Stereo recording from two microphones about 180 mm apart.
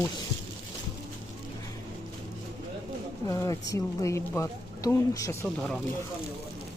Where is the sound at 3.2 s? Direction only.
20° left (ahead or behind).